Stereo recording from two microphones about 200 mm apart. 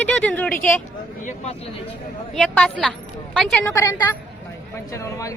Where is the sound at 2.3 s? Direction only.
5° left (ahead or behind).